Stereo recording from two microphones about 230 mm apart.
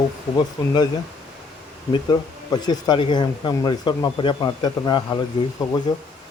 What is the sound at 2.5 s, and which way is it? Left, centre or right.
Speech, centre.